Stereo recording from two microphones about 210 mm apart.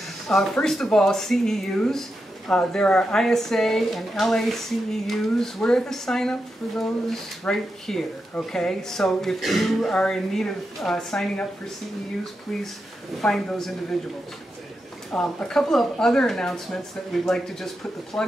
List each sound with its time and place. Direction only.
0.3 s speech: centre (ahead or behind)
13.2 s speech: centre (ahead or behind)
15.0 s speech: 5° left (ahead or behind)